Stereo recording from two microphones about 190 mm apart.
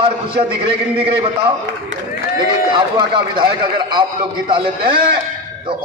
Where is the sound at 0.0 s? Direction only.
25° right (ahead or behind).